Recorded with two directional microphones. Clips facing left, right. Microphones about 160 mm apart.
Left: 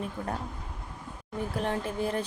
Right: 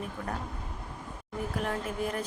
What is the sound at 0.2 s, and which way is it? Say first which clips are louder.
Speech: left 2 dB; 30° left (ahead or behind).